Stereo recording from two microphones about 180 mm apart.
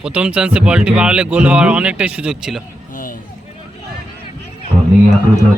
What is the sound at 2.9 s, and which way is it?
Vehicle, 50° left (ahead or behind).